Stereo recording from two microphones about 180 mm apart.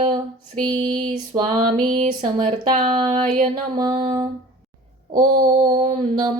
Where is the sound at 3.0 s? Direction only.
25° right (ahead or behind).